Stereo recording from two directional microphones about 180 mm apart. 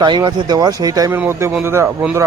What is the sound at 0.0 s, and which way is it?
Speech, 25° right (ahead or behind).